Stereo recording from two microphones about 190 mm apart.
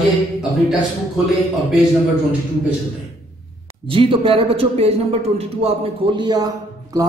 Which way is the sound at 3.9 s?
30° right (ahead or behind).